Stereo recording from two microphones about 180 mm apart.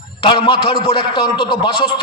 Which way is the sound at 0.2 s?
25° left (ahead or behind).